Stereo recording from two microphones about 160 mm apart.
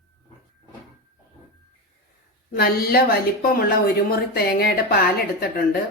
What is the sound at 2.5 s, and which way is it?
A woman's voice, 70° left (ahead or behind).